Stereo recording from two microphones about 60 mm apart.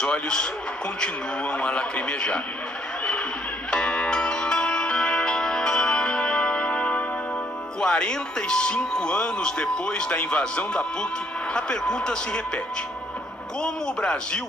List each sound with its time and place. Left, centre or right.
0.0 s speech: centre
3.7 s music: centre
7.8 s speech: centre
13.6 s speech: centre